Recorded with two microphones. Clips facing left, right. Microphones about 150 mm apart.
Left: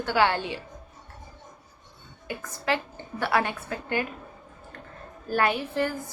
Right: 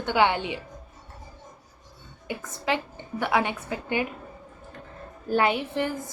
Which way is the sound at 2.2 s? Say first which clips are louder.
Even; 15° right (ahead or behind).